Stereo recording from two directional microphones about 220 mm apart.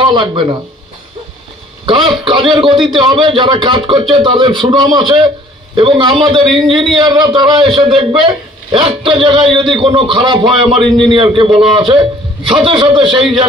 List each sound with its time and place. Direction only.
0.0 s speech: 20° right (ahead or behind)
1.9 s a man's voice: 20° right (ahead or behind)